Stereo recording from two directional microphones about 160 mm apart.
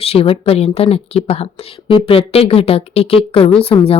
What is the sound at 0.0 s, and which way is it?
Speech, 40° left (ahead or behind).